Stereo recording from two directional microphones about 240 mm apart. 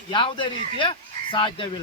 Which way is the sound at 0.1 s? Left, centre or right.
Left.